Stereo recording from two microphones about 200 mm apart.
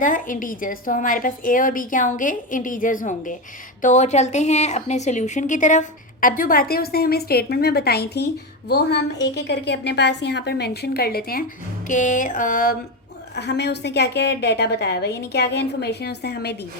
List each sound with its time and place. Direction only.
0.0 s a woman's voice: 40° left (ahead or behind)
13.3 s a woman's voice: 55° left (ahead or behind)